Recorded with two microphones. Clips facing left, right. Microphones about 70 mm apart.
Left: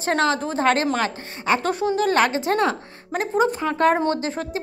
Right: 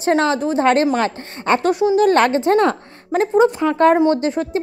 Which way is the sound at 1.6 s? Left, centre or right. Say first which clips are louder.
Right 7 dB; centre.